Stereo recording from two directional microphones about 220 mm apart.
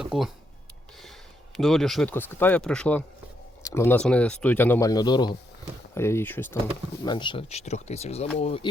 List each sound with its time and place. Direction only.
0.0 s a sound: centre (ahead or behind)
1.5 s speech: centre (ahead or behind)
7.0 s speech: 20° left (ahead or behind)